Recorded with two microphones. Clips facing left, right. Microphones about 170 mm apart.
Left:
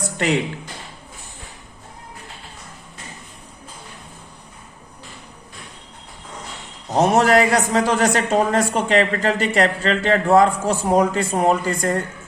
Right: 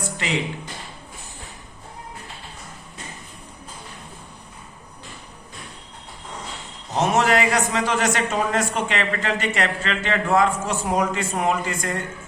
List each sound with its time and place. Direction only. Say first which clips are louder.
6.9 s a man's voice: left 4 dB; 40° left (ahead or behind)